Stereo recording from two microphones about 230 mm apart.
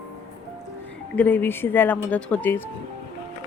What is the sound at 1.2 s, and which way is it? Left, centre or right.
Speech, centre.